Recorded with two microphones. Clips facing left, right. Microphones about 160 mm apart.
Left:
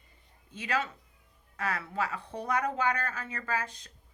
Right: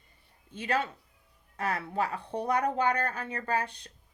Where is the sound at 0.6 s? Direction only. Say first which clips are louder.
Right 2 dB; 30° right (ahead or behind).